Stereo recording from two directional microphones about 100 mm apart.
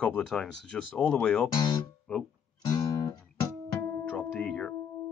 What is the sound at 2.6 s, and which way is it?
Music, 35° left (ahead or behind).